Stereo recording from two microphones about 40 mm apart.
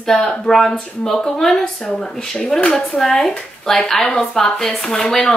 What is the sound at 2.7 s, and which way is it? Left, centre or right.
Speech, centre.